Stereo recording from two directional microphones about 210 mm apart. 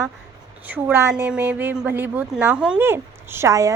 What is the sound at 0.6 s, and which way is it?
A woman's voice, 10° right (ahead or behind).